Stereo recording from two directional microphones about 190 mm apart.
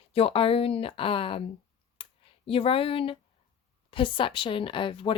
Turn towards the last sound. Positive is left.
turn(degrees=25)  # may be behind; listen again after turning